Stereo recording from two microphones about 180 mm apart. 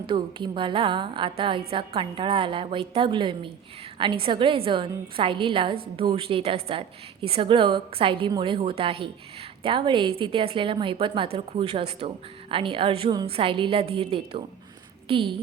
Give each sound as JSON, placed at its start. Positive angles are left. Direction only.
{"t": 0.1, "sound": "a woman's voice", "side_deg": -25}